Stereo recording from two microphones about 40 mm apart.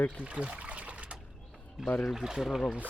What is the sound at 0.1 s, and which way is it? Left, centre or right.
Trickle, right.